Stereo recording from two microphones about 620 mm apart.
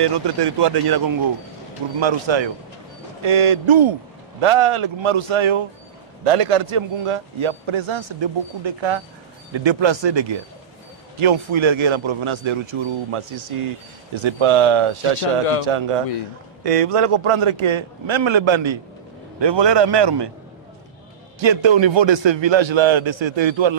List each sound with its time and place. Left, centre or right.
0.0 s a man's voice: right
21.4 s a man's voice: right